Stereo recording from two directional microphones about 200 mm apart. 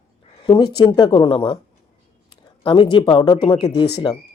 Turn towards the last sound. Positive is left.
turn(degrees=20)  # may be behind; listen again after turning